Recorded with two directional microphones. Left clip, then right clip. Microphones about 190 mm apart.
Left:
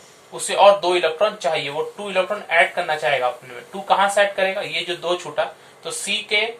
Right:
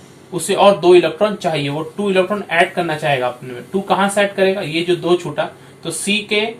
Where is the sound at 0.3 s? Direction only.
10° left (ahead or behind).